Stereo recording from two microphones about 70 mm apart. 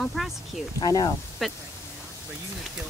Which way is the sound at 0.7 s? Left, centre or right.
Left.